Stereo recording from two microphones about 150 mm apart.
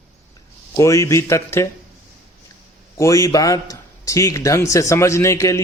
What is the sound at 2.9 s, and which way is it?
A man's voice, 20° left (ahead or behind).